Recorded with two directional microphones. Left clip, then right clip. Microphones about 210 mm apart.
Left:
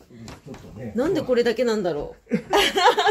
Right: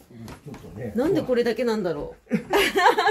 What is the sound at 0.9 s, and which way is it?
Speech, 5° left (ahead or behind).